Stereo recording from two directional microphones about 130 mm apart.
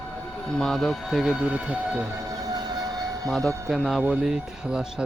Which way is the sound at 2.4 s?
30° right (ahead or behind).